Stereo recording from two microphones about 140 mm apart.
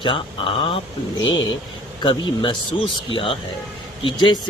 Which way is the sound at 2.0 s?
35° left (ahead or behind).